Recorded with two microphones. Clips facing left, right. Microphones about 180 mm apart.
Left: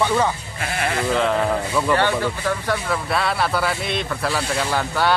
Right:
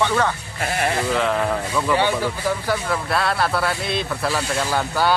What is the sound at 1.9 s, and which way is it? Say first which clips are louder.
Speech: even; 10° right (ahead or behind).